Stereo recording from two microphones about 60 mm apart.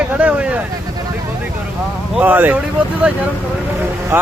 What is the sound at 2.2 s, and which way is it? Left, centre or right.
Speech, right.